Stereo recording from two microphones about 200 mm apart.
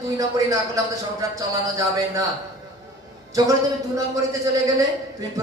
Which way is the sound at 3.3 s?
15° right (ahead or behind).